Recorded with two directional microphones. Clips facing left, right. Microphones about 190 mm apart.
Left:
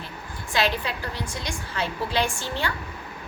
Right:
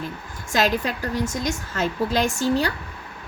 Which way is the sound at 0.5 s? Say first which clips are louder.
Right 4 dB; 45° right (ahead or behind).